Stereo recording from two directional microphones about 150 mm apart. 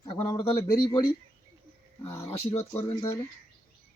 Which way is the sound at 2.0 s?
20° left (ahead or behind).